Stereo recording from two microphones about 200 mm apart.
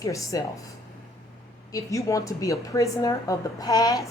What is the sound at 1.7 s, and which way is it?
A woman's voice, 15° left (ahead or behind).